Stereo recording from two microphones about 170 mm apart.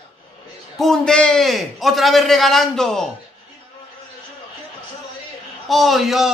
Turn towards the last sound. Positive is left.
turn(degrees=0)  # may be behind; listen again after turning